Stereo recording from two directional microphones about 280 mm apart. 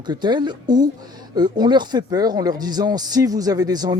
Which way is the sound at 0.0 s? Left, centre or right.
Centre.